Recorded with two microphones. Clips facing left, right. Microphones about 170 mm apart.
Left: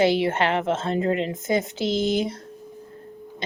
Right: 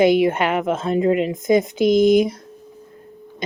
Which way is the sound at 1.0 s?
15° right (ahead or behind).